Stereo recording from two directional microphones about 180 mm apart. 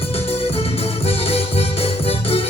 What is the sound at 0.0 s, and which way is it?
Music, 30° left (ahead or behind).